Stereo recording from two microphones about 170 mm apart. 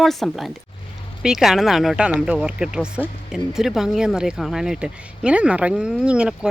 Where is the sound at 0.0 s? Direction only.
Centre (ahead or behind).